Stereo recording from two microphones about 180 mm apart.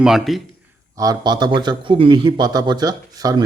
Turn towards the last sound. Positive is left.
turn(degrees=-20)  # may be behind; listen again after turning